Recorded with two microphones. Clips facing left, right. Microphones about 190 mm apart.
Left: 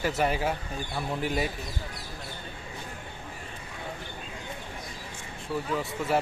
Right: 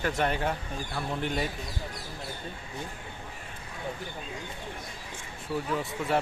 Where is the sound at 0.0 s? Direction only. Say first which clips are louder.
Left 1 dB; 5° left (ahead or behind).